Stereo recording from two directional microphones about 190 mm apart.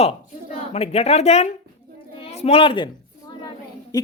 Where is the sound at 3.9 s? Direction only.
20° left (ahead or behind).